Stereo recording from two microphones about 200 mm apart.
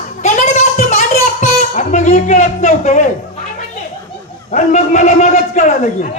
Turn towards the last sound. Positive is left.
turn(degrees=40)  # may be behind; listen again after turning